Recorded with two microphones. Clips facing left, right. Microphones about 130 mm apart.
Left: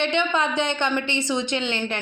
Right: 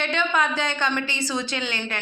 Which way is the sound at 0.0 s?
20° left (ahead or behind).